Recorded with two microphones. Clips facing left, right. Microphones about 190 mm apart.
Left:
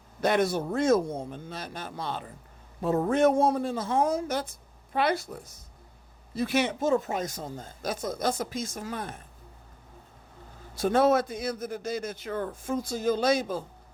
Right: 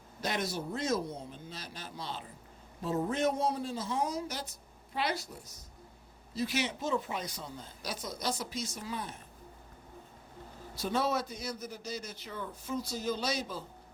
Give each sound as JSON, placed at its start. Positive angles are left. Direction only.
{"t": 0.2, "sound": "a man's voice", "side_deg": 55}
{"t": 10.8, "sound": "a man's voice", "side_deg": 50}